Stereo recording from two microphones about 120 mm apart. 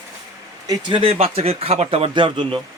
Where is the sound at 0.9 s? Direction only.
50° right (ahead or behind).